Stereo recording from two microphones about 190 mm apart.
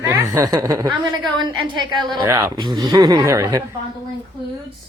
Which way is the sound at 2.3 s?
10° right (ahead or behind).